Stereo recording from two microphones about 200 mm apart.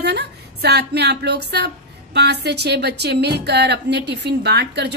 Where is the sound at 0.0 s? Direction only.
55° right (ahead or behind).